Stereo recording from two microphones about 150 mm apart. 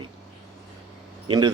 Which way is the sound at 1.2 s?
30° right (ahead or behind).